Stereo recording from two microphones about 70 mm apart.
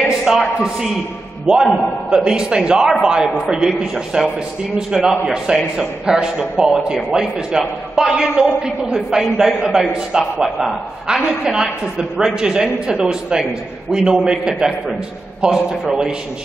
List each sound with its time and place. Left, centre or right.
0.0 s a man's voice: centre